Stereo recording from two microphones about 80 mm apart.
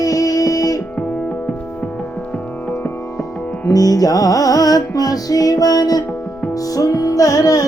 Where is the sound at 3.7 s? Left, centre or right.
Left.